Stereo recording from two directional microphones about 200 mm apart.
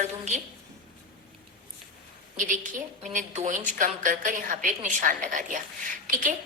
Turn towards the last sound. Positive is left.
turn(degrees=-40)  # may be behind; listen again after turning